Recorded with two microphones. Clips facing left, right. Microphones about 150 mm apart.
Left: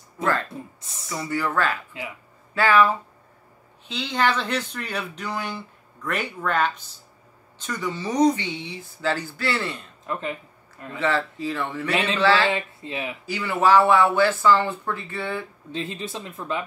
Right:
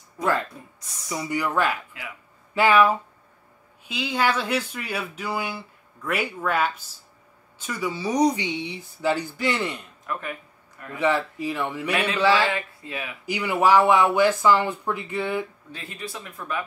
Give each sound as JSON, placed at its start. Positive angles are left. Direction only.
{"t": 0.2, "sound": "a woman's voice", "side_deg": -15}
{"t": 10.1, "sound": "speech", "side_deg": 25}
{"t": 11.0, "sound": "a woman's voice", "side_deg": -15}
{"t": 12.4, "sound": "speech", "side_deg": 25}
{"t": 13.2, "sound": "a woman's voice", "side_deg": -15}
{"t": 15.7, "sound": "speech", "side_deg": 25}